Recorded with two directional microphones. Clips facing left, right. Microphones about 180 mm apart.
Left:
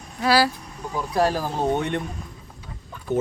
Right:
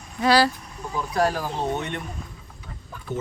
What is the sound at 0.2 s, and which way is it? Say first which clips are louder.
Speech: right 1 dB; 5° left (ahead or behind).